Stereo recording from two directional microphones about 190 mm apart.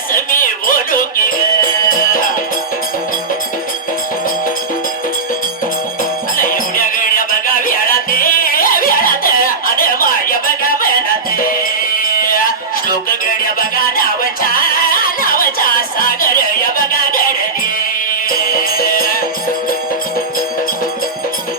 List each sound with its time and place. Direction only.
0.1 s music: 45° left (ahead or behind)
6.3 s music: 45° left (ahead or behind)